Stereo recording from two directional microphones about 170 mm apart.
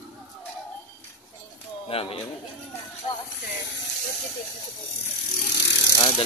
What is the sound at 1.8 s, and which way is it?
Speech, 35° left (ahead or behind).